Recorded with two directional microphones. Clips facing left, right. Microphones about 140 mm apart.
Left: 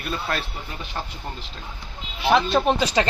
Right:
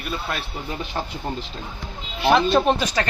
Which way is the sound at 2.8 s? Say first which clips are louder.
Left 2 dB; 20° left (ahead or behind).